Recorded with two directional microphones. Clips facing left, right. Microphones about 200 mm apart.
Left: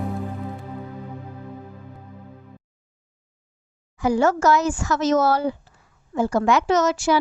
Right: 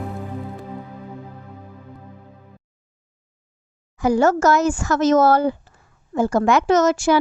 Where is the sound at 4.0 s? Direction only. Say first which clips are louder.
Right 3 dB; 45° right (ahead or behind).